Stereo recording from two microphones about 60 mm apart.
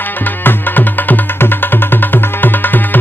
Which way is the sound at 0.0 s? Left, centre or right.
Left.